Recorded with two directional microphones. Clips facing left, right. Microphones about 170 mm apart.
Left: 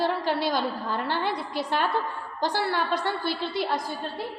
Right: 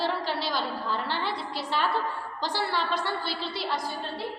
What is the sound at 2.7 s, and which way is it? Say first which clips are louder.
A woman's voice: left 2 dB; 50° left (ahead or behind).